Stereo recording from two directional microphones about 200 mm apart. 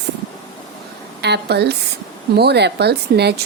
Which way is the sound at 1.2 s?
55° right (ahead or behind).